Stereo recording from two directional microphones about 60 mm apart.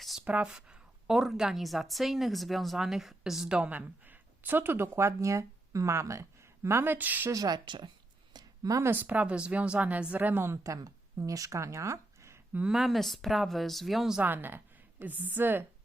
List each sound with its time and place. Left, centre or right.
0.3 s speech: right
0.5 s a woman's voice: centre
3.7 s speech: right
6.9 s speech: right
7.3 s speech: right
8.9 s speech: right
10.6 s speech: right
12.6 s a woman's voice: centre
14.2 s a woman's voice: right